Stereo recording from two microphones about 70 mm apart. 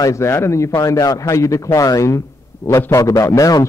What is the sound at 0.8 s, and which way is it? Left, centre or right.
A man's voice, left.